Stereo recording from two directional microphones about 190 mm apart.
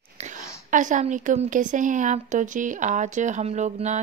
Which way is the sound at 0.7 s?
40° right (ahead or behind).